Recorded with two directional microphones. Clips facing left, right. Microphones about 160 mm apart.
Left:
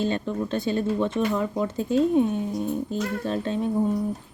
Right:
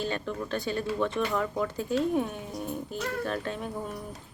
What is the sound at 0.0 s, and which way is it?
Speech, 25° left (ahead or behind).